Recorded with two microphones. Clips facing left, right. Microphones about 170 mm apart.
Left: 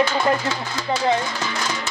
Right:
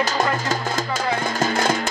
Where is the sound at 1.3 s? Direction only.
50° right (ahead or behind).